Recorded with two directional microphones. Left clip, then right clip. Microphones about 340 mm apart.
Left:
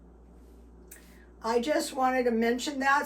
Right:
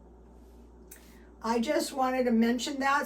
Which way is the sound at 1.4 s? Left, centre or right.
Centre.